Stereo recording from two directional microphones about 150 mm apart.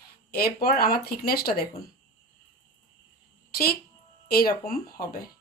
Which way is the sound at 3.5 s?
90° left.